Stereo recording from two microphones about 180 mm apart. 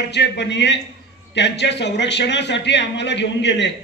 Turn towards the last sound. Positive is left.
turn(degrees=75)  # may be behind; listen again after turning